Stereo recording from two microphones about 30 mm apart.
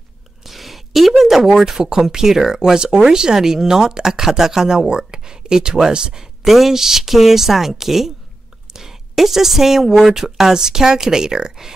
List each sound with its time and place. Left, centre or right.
0.5 s a sound: centre
1.2 s speech: centre
6.4 s speech: centre; by 11.7 s right